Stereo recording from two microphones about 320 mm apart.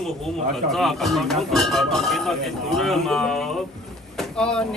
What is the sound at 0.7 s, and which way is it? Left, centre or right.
Speech, centre.